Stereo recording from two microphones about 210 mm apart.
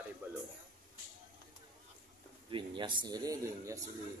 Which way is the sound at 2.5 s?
25° right (ahead or behind).